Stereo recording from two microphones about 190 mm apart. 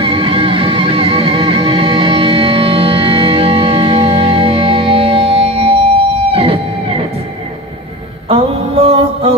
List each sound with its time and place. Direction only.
0.0 s music: 30° right (ahead or behind)
8.3 s mantra: 30° right (ahead or behind)